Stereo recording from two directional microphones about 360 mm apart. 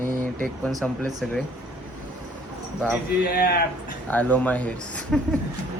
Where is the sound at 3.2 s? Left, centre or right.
Left.